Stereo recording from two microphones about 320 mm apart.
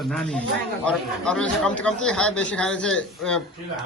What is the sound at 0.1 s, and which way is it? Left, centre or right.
A woman's voice, centre.